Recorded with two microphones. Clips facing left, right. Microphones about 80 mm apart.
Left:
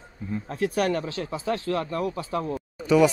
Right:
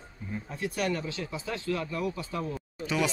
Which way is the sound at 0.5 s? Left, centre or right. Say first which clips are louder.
Left 6 dB; left.